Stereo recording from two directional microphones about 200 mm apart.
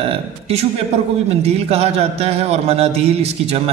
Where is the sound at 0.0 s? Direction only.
30° right (ahead or behind).